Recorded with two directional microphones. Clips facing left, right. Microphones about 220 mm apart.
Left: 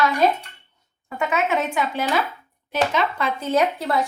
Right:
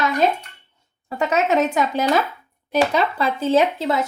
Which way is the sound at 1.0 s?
35° right (ahead or behind).